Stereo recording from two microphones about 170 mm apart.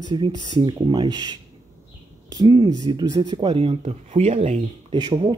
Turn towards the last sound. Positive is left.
turn(degrees=-25)  # may be behind; listen again after turning